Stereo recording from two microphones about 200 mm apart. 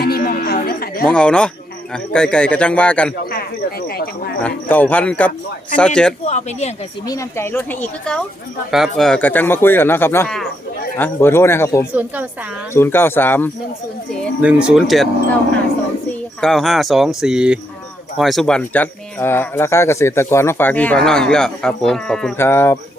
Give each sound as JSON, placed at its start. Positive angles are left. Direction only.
{"t": 0.0, "sound": "music", "side_deg": 50}
{"t": 1.0, "sound": "a man's voice", "side_deg": 5}
{"t": 3.3, "sound": "a sound", "side_deg": 50}
{"t": 4.4, "sound": "a man's voice", "side_deg": 10}
{"t": 6.2, "sound": "speech", "side_deg": 35}
{"t": 7.1, "sound": "speech", "side_deg": 15}
{"t": 11.9, "sound": "a woman's voice", "side_deg": -10}
{"t": 12.7, "sound": "speech", "side_deg": 10}
{"t": 14.4, "sound": "a man's voice", "side_deg": -5}
{"t": 16.4, "sound": "a man's voice", "side_deg": 0}